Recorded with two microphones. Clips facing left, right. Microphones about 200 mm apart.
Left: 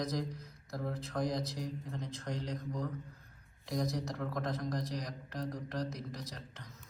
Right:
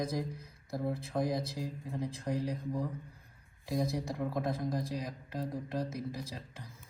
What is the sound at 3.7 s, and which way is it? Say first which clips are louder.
Speech: right 2 dB; 30° right (ahead or behind).